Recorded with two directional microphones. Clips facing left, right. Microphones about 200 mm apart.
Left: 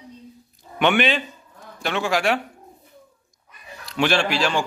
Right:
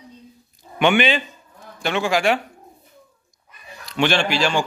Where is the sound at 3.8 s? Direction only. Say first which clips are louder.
Right 1 dB; 5° left (ahead or behind).